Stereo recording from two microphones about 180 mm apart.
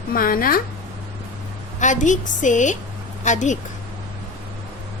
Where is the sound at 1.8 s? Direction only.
45° left (ahead or behind).